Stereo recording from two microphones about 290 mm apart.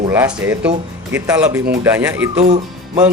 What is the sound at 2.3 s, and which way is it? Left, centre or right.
Speech, right.